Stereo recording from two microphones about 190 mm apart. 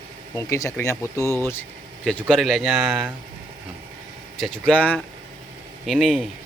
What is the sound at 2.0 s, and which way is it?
Speech, 5° left (ahead or behind).